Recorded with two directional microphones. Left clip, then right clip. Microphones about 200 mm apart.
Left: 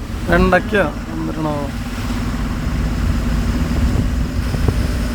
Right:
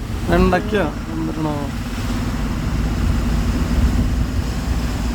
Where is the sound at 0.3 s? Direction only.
15° right (ahead or behind).